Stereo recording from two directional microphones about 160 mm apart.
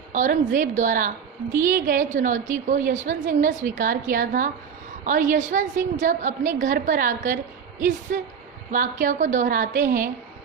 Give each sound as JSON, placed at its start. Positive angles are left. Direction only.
{"t": 0.1, "sound": "a woman's voice", "side_deg": -50}